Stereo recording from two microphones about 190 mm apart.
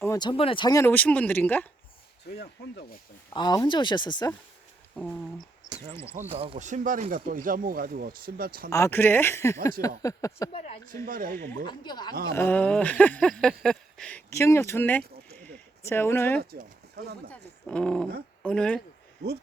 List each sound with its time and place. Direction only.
0.0 s speech: 20° left (ahead or behind)
2.2 s speech: 60° left (ahead or behind)
3.3 s speech: 20° left (ahead or behind)
5.6 s speech: 20° right (ahead or behind); by 8.7 s 50° right (ahead or behind)
8.7 s speech: 15° left (ahead or behind)
10.5 s speech: 30° left (ahead or behind)
11.0 s speech: 50° right (ahead or behind)
11.6 s speech: 25° left (ahead or behind)
12.3 s speech: 10° left (ahead or behind)
15.4 s a sound: 10° left (ahead or behind)
16.4 s speech: 55° right (ahead or behind)
17.7 s speech: 5° left (ahead or behind)